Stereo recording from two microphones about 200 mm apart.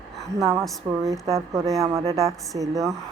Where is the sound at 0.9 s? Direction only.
10° right (ahead or behind).